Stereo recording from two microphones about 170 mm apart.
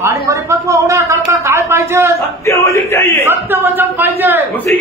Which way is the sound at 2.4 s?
15° left (ahead or behind).